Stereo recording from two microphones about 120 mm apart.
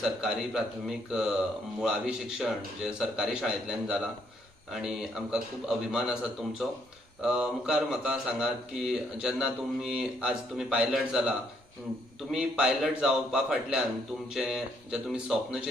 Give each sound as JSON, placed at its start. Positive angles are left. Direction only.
{"t": 0.0, "sound": "speech", "side_deg": -5}
{"t": 7.2, "sound": "speech", "side_deg": -5}